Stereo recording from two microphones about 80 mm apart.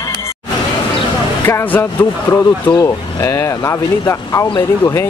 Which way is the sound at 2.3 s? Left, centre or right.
Left.